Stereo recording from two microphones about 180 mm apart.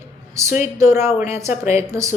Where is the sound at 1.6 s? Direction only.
15° right (ahead or behind).